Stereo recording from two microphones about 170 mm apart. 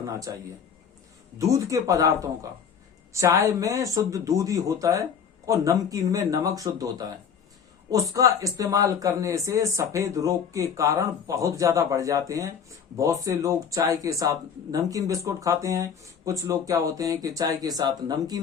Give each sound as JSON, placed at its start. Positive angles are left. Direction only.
{"t": 0.0, "sound": "speech", "side_deg": -20}
{"t": 1.4, "sound": "speech", "side_deg": -20}